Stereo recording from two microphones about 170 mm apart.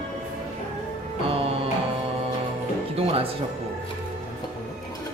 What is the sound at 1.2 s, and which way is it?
Music, 35° right (ahead or behind).